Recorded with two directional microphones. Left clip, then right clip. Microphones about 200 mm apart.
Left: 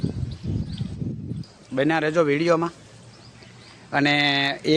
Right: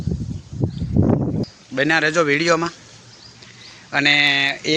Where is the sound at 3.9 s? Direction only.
15° left (ahead or behind).